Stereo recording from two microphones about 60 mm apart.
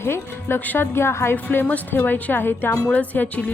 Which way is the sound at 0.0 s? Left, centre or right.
Left.